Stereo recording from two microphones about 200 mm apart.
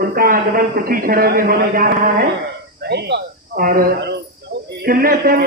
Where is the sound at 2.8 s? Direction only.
55° right (ahead or behind).